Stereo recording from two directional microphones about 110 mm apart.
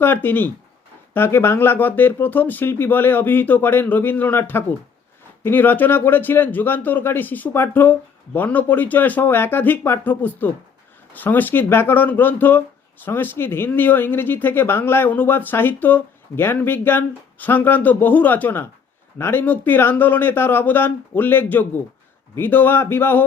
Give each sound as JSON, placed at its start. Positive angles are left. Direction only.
{"t": 0.0, "sound": "speech", "side_deg": 20}